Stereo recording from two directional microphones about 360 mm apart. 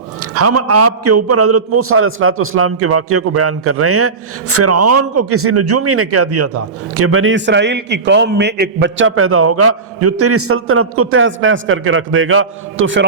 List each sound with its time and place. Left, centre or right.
0.2 s a man's voice: right